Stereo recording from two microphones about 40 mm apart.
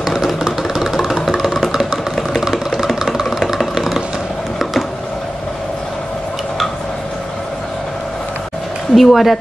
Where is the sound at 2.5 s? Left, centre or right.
Centre.